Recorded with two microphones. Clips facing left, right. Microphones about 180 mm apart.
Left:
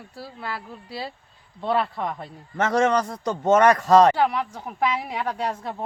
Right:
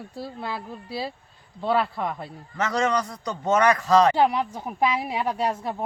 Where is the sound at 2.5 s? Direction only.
50° left (ahead or behind).